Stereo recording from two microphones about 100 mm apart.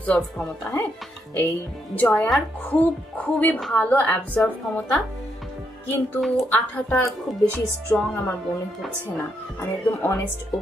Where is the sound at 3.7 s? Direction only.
15° left (ahead or behind).